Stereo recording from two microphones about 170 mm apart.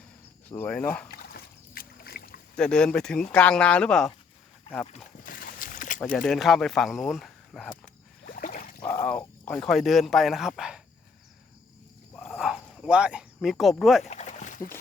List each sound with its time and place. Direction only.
0.4 s speech: 10° left (ahead or behind)
1.1 s boat: 60° left (ahead or behind)
2.6 s speech: 5° left (ahead or behind)
5.2 s boat: 55° left (ahead or behind)
6.2 s speech: centre (ahead or behind)
8.2 s a sound: 60° left (ahead or behind)
8.8 s speech: 10° left (ahead or behind)
12.3 s a sound: centre (ahead or behind)
14.0 s rowboat: 45° left (ahead or behind)